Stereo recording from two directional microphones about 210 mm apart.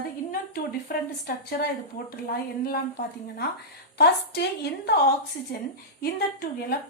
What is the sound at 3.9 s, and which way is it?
Speech, 50° left (ahead or behind).